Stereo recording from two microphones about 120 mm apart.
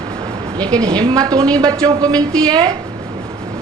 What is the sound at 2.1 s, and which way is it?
Speech, 10° left (ahead or behind).